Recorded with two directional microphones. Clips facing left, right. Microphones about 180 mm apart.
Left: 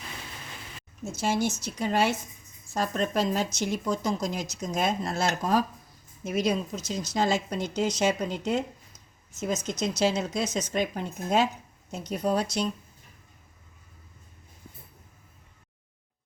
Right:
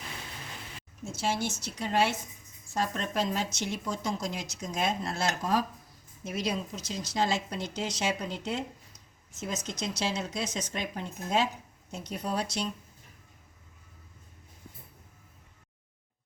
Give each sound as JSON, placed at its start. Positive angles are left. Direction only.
{"t": 1.1, "sound": "speech", "side_deg": 45}